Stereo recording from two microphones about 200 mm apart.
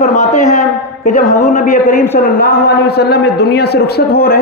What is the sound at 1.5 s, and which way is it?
A man's voice, 50° left (ahead or behind).